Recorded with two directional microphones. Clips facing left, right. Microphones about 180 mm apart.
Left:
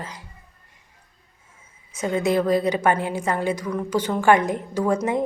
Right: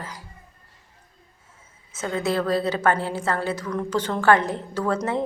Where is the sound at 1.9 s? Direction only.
15° left (ahead or behind).